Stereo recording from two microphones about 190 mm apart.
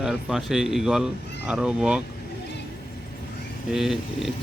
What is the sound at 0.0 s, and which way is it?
Speech, 5° right (ahead or behind).